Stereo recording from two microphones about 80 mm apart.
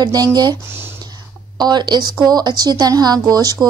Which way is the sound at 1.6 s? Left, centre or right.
Right.